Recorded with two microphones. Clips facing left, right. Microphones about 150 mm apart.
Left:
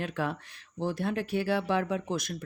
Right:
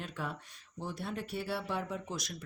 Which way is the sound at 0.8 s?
90° left.